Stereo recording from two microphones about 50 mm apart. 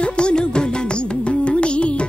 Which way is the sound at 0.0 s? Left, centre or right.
Centre.